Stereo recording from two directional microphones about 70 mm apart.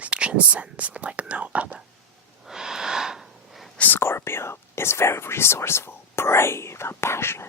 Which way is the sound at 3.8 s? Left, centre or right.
Left.